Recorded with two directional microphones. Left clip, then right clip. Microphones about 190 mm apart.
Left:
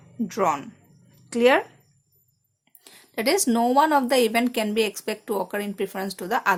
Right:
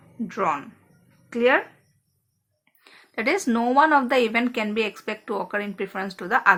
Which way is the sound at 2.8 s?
35° left (ahead or behind).